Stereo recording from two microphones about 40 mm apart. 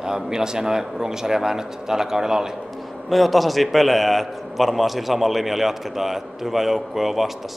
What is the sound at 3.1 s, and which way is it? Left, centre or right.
A man's voice, centre.